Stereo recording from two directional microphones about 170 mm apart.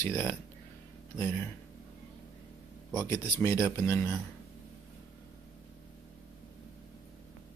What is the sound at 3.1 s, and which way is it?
Speech, 15° left (ahead or behind).